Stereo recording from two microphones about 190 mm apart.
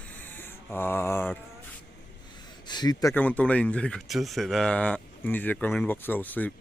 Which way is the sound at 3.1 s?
10° left (ahead or behind).